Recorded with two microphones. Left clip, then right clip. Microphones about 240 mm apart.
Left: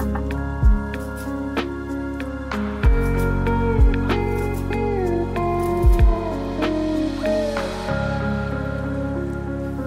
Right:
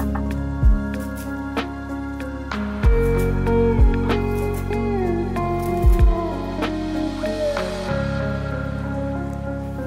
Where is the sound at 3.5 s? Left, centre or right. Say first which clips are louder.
Right 5 dB; centre.